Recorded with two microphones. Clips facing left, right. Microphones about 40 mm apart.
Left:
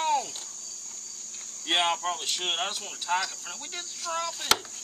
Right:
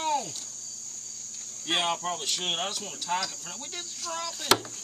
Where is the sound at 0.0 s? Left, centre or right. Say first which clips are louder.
Left 2 dB; centre.